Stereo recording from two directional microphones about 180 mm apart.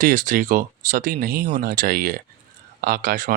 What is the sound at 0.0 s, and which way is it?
Speech, 50° right (ahead or behind).